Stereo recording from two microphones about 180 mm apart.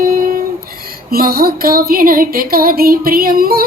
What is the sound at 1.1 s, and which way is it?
Music, 55° right (ahead or behind).